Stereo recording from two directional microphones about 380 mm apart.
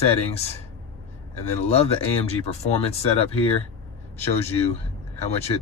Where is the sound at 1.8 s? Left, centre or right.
Centre.